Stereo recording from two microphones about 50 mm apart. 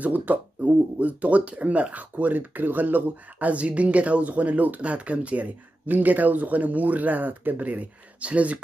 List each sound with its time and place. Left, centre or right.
0.0 s speech: right